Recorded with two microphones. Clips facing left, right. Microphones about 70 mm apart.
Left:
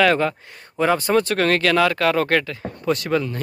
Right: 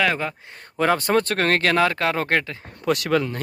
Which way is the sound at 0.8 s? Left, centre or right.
Right.